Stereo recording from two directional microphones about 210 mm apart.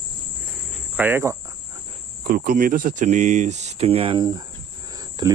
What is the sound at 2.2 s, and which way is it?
Speech, 40° right (ahead or behind).